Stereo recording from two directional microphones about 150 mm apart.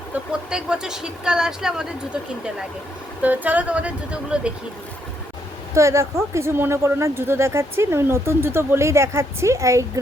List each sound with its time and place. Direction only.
0.1 s speech: 5° right (ahead or behind)
3.2 s speech: 10° right (ahead or behind)
5.7 s speech: 20° right (ahead or behind)